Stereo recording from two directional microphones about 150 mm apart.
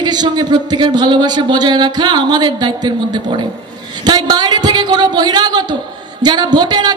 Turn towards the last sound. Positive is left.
turn(degrees=-30)  # may be behind; listen again after turning